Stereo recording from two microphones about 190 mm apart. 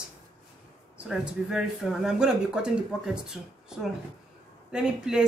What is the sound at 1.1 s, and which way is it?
Speech, centre (ahead or behind).